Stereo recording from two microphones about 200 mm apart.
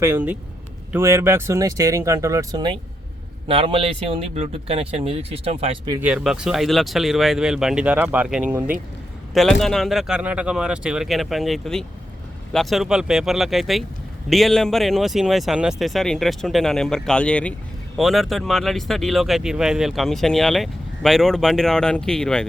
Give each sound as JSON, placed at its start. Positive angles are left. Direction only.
{"t": 0.0, "sound": "speech", "side_deg": -10}
{"t": 6.0, "sound": "speech", "side_deg": -5}